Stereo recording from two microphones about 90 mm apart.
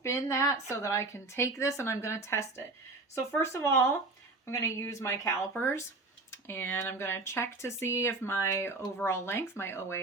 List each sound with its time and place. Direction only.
0.0 s speech: 30° left (ahead or behind)